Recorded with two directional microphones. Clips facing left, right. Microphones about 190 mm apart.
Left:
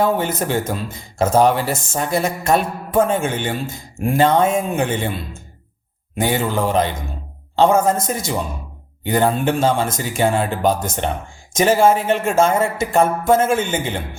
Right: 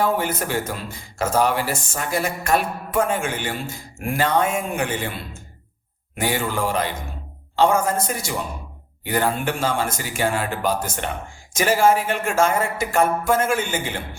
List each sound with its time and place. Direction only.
0.2 s speech: 25° left (ahead or behind)
6.1 s speech: 25° left (ahead or behind)